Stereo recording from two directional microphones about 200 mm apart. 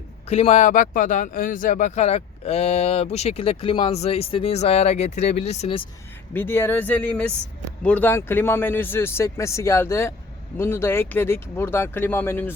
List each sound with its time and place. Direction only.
0.3 s speech: 30° left (ahead or behind)
6.3 s speech: 10° left (ahead or behind)